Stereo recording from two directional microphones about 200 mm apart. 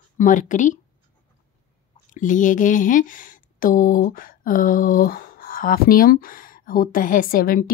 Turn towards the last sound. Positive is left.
turn(degrees=45)  # may be behind; listen again after turning